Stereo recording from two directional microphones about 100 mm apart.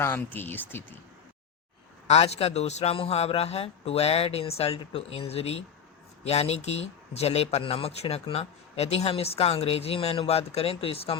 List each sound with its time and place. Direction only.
0.0 s speech: 20° left (ahead or behind)
2.0 s a man's voice: 90° left
4.8 s speech: 65° left (ahead or behind)